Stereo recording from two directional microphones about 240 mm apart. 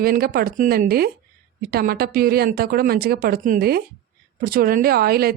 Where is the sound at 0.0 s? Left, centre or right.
Right.